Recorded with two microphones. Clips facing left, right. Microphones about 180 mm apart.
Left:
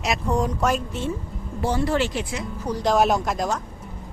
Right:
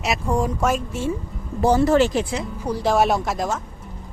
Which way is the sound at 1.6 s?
40° right (ahead or behind).